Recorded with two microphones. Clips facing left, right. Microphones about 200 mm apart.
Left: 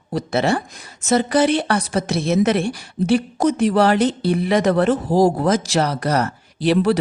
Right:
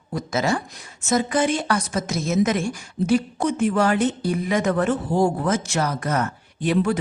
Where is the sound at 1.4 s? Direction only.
70° left (ahead or behind).